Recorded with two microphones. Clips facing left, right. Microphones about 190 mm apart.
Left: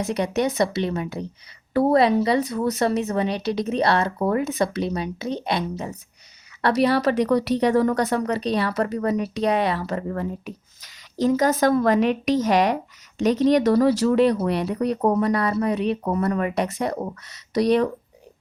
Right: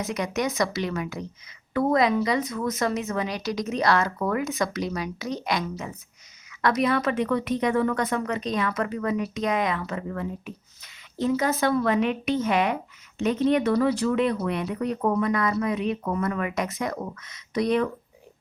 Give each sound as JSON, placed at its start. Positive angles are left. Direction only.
{"t": 0.1, "sound": "speech", "side_deg": 30}